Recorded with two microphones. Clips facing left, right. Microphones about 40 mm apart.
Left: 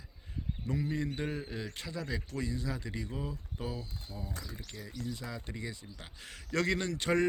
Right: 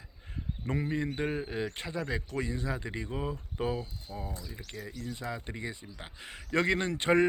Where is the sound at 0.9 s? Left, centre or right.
Right.